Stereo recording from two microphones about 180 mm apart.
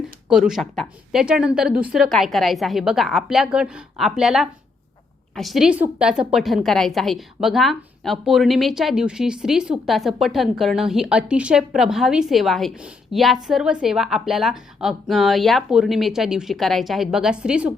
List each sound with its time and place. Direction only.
0.3 s a woman's voice: 5° right (ahead or behind)